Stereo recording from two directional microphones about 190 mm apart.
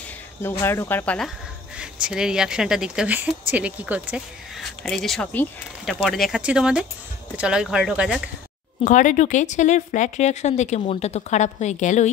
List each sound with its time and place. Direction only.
0.4 s speech: 15° left (ahead or behind)
1.8 s speech: 5° right (ahead or behind)
8.8 s speech: 40° left (ahead or behind)